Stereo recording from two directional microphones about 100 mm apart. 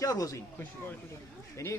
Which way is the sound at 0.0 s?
35° left (ahead or behind).